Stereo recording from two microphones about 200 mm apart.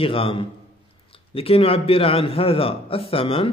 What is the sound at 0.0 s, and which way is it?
A man's voice, 25° left (ahead or behind).